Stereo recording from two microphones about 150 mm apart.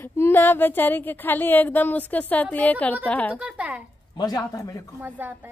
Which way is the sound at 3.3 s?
5° right (ahead or behind).